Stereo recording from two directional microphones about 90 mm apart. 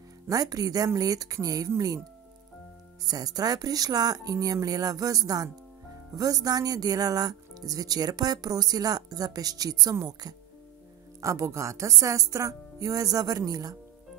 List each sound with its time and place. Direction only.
0.3 s speech: 45° right (ahead or behind)
3.1 s speech: 45° right (ahead or behind)